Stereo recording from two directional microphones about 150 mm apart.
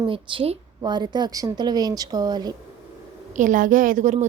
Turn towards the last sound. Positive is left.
turn(degrees=-55)  # may be behind; listen again after turning